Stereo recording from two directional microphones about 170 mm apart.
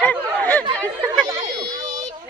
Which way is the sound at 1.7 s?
45° right (ahead or behind).